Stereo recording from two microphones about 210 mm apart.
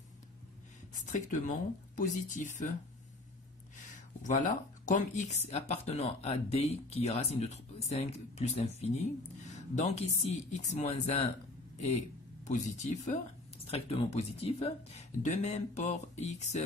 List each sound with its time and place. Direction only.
1.0 s speech: 35° left (ahead or behind)
3.9 s speech: 35° left (ahead or behind)
12.4 s speech: 35° left (ahead or behind)